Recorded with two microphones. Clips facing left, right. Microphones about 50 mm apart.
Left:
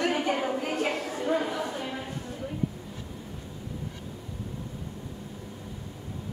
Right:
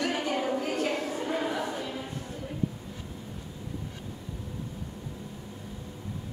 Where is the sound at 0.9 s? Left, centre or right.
Centre.